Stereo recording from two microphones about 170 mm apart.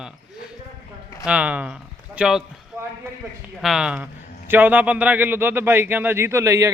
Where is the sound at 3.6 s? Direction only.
5° right (ahead or behind).